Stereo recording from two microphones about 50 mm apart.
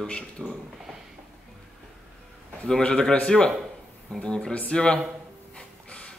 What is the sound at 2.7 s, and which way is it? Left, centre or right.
A man's voice, centre.